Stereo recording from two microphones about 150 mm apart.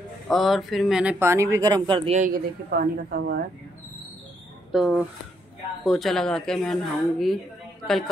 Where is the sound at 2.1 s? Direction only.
70° right (ahead or behind); by 3.4 s 90° right.